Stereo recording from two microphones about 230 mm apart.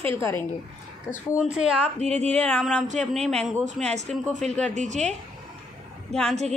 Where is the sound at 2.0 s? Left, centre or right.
Right.